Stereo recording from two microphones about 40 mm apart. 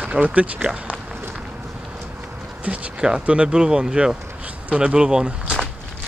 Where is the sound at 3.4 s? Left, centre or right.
Centre.